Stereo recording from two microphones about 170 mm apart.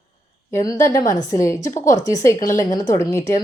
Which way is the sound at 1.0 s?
45° left (ahead or behind).